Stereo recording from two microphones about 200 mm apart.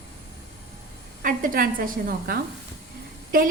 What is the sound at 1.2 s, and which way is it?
A woman's voice, 45° right (ahead or behind).